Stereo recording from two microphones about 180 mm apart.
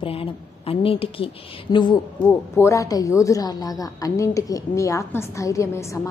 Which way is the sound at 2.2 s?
10° left (ahead or behind).